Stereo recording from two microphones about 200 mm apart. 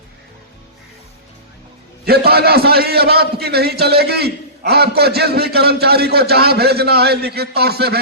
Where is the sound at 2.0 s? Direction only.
50° right (ahead or behind).